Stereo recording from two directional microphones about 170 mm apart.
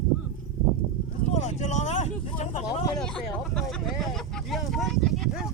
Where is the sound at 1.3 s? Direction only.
40° left (ahead or behind).